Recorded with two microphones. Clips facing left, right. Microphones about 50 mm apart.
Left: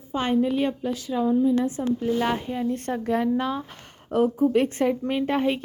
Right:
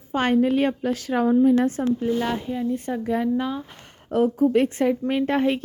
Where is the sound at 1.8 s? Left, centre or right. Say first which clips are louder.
Right 2 dB; right.